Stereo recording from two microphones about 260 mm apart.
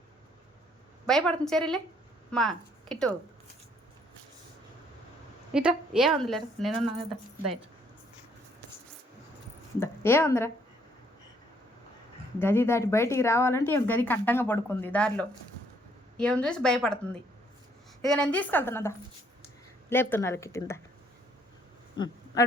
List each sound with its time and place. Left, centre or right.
1.0 s a woman's voice: centre
5.5 s a woman's voice: centre
9.8 s speech: centre
12.4 s a woman's voice: centre
18.0 s speech: centre
21.9 s a sound: centre